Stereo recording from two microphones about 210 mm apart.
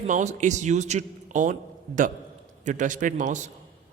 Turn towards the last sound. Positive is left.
turn(degrees=-35)  # may be behind; listen again after turning